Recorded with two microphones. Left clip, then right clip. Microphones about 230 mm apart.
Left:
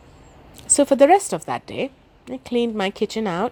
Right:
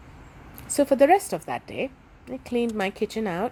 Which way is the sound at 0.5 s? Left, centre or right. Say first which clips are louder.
Left 4 dB; left.